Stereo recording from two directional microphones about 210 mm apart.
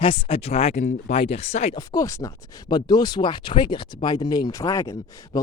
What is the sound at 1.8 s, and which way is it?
Speech, 15° left (ahead or behind).